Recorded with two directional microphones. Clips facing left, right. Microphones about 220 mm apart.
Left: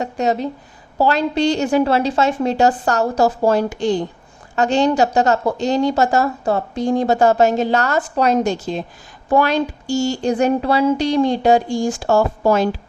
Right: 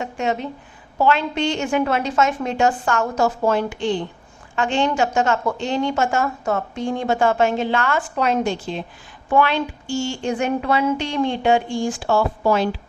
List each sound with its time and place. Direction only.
0.0 s a woman's voice: 40° left (ahead or behind)